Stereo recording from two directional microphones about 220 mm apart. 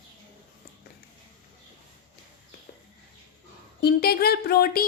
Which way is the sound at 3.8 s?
45° left (ahead or behind).